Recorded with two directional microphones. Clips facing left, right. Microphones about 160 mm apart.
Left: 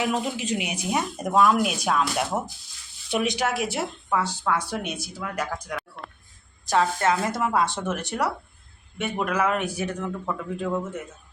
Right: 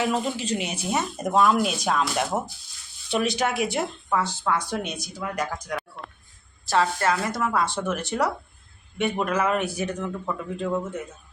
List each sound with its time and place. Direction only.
0.0 s speech: 15° left (ahead or behind)
3.4 s speech: centre (ahead or behind); by 8.1 s 20° left (ahead or behind)
9.0 s speech: 5° left (ahead or behind)